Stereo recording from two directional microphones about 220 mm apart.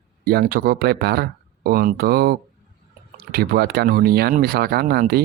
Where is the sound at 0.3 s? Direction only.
45° right (ahead or behind).